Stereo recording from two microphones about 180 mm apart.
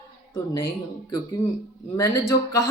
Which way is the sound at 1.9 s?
15° left (ahead or behind).